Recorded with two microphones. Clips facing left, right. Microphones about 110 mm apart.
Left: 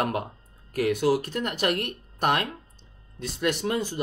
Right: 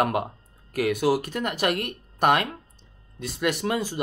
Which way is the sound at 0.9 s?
10° right (ahead or behind).